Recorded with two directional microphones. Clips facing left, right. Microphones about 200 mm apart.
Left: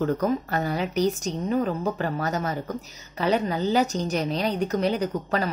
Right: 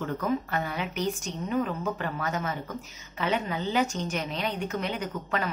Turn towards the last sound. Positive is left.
turn(degrees=35)  # may be behind; listen again after turning